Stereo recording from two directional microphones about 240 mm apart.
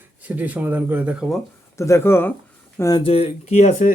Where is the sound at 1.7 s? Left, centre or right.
Centre; by 3.9 s left.